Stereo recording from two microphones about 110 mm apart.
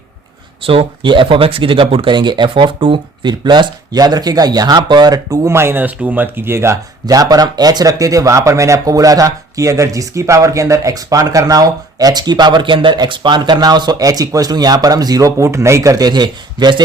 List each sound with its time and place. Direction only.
0.6 s speech: 55° right (ahead or behind); by 6.7 s 20° right (ahead or behind)
7.0 s speech: 35° right (ahead or behind)